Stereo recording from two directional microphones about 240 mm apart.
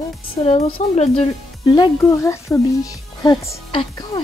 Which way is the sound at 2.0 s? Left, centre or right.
Centre.